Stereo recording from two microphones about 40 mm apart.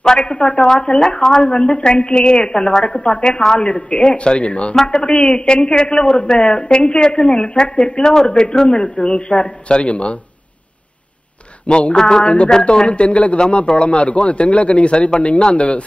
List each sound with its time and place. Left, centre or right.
0.0 s a man's voice: centre
11.6 s speech: left
11.9 s a sound: centre
12.4 s a man's voice: centre